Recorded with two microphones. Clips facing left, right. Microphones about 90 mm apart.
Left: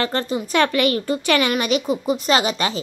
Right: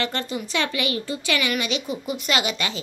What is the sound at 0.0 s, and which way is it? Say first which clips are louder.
Speech: left 5 dB; 35° left (ahead or behind).